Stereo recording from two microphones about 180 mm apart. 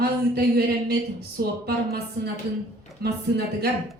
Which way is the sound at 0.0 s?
65° right (ahead or behind).